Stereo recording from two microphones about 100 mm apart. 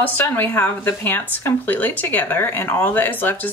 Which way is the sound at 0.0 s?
15° left (ahead or behind).